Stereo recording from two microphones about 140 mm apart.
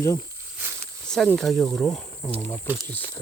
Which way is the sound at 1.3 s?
Centre (ahead or behind).